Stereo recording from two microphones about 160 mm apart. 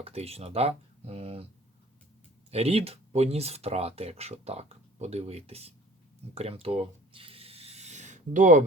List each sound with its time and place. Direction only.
0.0 s speech: 40° right (ahead or behind)
2.5 s speech: 40° right (ahead or behind)
6.3 s a sound: 35° right (ahead or behind); by 8.6 s 55° right (ahead or behind)